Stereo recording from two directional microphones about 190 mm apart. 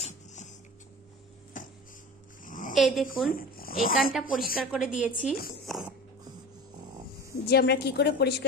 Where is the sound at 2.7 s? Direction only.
Centre (ahead or behind).